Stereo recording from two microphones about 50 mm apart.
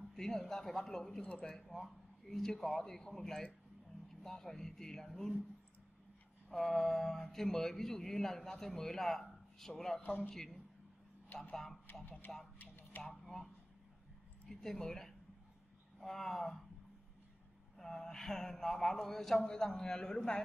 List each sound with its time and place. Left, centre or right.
0.1 s speech: centre
6.5 s speech: centre
10.0 s speech: left
10.3 s speech: centre
12.5 s a sound: left
13.0 s speech: centre
14.5 s speech: centre
17.7 s speech: centre